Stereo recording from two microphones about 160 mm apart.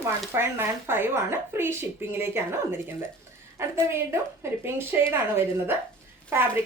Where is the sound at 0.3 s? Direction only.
15° right (ahead or behind).